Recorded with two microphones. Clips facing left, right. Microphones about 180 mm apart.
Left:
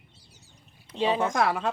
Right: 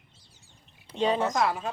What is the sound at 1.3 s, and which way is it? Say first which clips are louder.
Speech: left 1 dB; 70° left (ahead or behind).